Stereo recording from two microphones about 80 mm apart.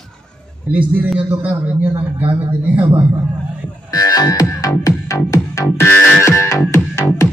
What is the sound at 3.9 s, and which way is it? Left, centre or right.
Music, left.